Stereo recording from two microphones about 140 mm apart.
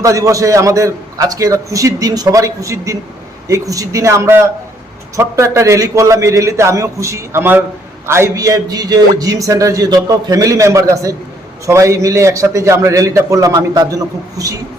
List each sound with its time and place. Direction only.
0.0 s a man's voice: 25° right (ahead or behind)